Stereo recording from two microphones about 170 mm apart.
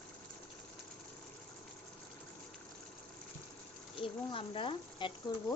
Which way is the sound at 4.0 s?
30° left (ahead or behind).